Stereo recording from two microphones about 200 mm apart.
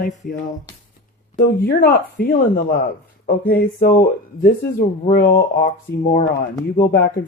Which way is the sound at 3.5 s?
50° left (ahead or behind).